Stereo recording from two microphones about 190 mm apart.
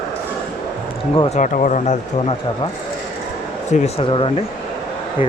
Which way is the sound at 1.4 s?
40° left (ahead or behind).